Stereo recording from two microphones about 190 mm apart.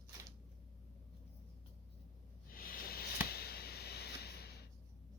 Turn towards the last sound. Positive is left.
turn(degrees=60)  # may be behind; listen again after turning